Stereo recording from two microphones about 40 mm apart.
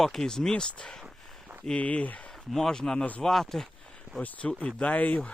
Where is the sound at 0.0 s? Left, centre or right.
Centre.